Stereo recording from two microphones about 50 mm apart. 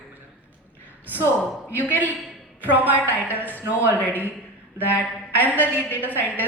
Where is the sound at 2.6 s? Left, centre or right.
Right.